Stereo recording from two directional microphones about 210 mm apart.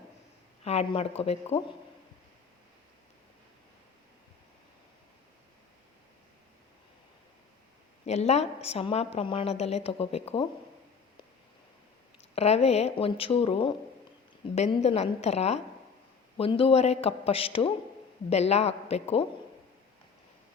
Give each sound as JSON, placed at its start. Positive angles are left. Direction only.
{"t": 0.6, "sound": "a woman's voice", "side_deg": 30}
{"t": 8.0, "sound": "a woman's voice", "side_deg": 30}
{"t": 12.3, "sound": "a woman's voice", "side_deg": 30}